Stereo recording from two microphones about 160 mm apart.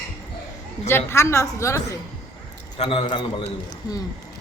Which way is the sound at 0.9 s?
15° left (ahead or behind).